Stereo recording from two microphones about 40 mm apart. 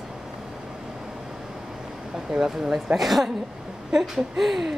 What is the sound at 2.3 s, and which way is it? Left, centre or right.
Speech, centre.